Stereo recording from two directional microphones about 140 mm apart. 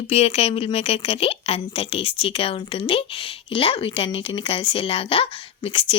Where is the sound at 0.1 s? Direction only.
45° left (ahead or behind).